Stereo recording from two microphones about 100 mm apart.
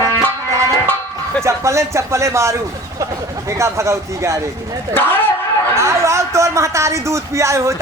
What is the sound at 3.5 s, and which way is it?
Speech, 30° right (ahead or behind).